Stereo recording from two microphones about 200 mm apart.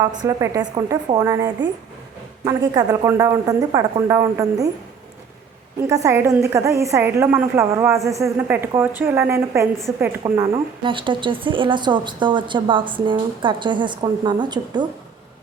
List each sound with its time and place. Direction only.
0.0 s speech: 20° right (ahead or behind)
5.9 s a woman's voice: 15° right (ahead or behind)